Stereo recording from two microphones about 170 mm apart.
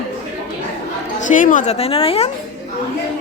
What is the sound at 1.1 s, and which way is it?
A woman's voice, 50° left (ahead or behind).